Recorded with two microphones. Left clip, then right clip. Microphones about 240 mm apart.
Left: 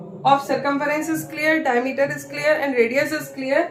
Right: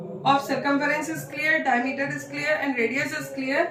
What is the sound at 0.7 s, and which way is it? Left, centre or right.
A woman's voice, centre.